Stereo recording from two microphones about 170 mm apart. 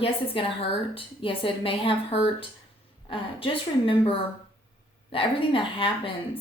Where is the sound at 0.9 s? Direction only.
30° left (ahead or behind).